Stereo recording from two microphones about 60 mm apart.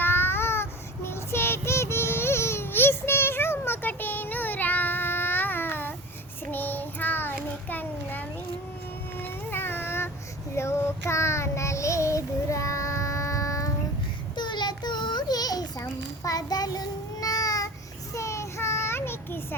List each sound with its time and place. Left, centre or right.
0.0 s child singing: left
9.1 s a sound: left
10.5 s child singing: left
15.3 s a sound: left
15.8 s child singing: left
18.1 s child singing: left